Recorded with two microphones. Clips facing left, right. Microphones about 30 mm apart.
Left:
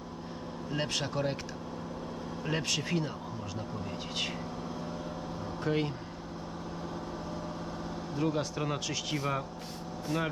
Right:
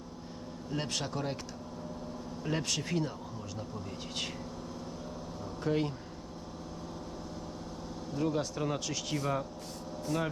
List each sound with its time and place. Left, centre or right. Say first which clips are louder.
0.8 s speech: left 3 dB; centre
2.4 s speech: left 1 dB; centre
5.6 s speech: even; centre
8.1 s speech: even; centre